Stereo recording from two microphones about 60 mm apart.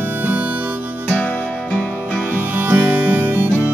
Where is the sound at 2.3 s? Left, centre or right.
Right.